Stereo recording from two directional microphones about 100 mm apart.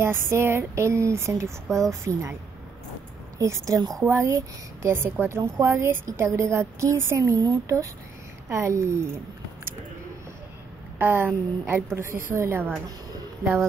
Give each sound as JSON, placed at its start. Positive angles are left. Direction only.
{"t": 0.0, "sound": "a woman's voice", "side_deg": -25}
{"t": 3.3, "sound": "a woman's voice", "side_deg": -30}
{"t": 11.0, "sound": "a woman's voice", "side_deg": -20}